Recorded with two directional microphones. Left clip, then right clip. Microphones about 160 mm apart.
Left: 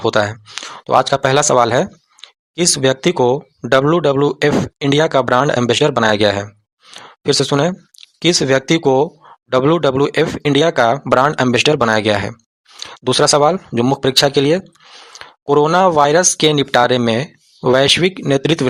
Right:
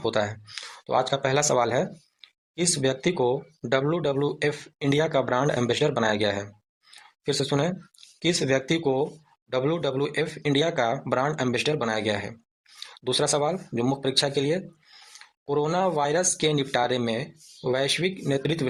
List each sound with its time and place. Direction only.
0.0 s speech: 35° left (ahead or behind)